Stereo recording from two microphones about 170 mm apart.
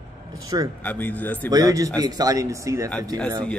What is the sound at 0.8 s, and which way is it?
Speech, 10° left (ahead or behind).